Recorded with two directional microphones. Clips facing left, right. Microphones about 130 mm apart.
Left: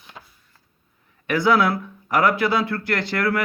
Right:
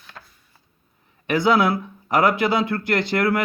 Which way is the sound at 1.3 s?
20° right (ahead or behind).